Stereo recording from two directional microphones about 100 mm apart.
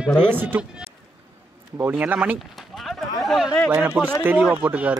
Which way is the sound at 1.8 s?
15° right (ahead or behind).